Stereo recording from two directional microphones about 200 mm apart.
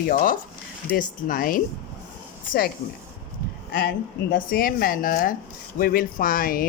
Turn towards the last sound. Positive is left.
turn(degrees=45)  # may be behind; listen again after turning